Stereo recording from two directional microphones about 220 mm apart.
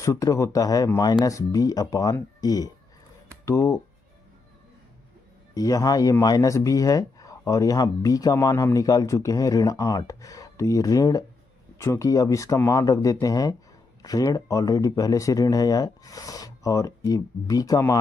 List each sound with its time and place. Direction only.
0.0 s speech: 15° left (ahead or behind)
5.5 s speech: 15° left (ahead or behind)